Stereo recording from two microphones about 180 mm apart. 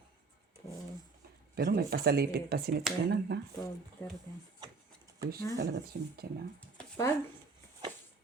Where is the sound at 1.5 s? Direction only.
60° right (ahead or behind).